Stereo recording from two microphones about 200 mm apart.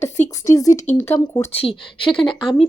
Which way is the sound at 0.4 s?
15° left (ahead or behind).